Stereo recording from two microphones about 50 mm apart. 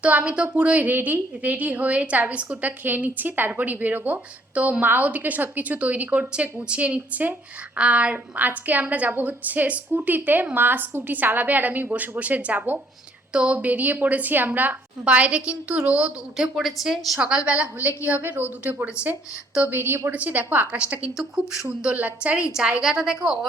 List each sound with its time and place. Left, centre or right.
0.1 s a woman's voice: right
0.9 s a woman's voice: right
8.1 s a woman's voice: right
15.0 s a woman's voice: right
16.6 s a woman's voice: centre; by 20.0 s right
20.1 s a woman's voice: right
20.7 s a woman's voice: right
22.8 s a woman's voice: centre